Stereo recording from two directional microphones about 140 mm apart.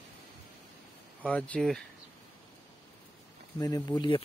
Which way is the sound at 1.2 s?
10° left (ahead or behind).